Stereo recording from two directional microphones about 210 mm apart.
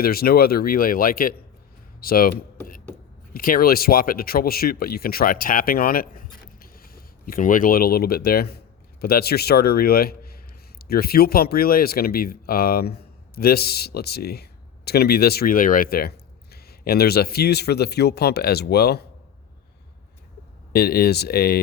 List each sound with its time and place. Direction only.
0.0 s speech: 45° left (ahead or behind)
3.3 s speech: 45° left (ahead or behind)
20.7 s speech: 45° left (ahead or behind)